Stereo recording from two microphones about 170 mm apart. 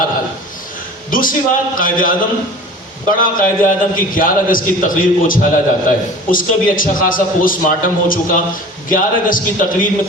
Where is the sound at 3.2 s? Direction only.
55° left (ahead or behind).